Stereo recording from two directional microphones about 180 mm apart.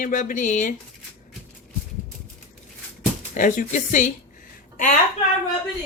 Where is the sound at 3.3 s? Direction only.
45° left (ahead or behind).